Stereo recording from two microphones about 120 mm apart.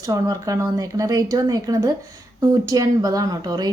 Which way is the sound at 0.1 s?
30° right (ahead or behind).